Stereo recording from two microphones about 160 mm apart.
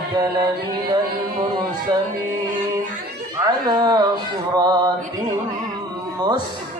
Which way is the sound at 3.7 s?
25° right (ahead or behind).